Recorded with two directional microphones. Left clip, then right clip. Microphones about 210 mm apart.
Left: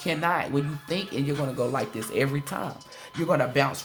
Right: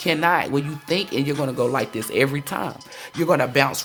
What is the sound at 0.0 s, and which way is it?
Speech, 40° right (ahead or behind).